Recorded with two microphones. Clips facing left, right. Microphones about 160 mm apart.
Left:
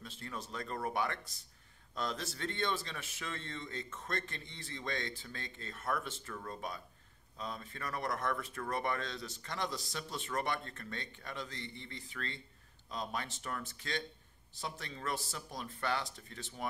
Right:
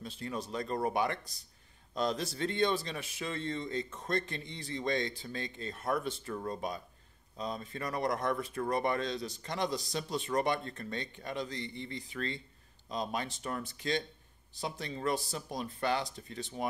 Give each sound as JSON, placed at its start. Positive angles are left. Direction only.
{"t": 0.0, "sound": "speech", "side_deg": -15}